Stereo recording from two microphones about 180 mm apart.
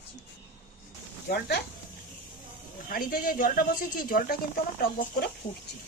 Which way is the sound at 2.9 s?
55° left (ahead or behind).